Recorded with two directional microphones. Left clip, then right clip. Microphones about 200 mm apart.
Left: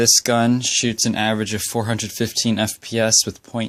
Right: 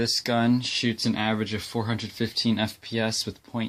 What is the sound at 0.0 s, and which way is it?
Speech, 40° left (ahead or behind).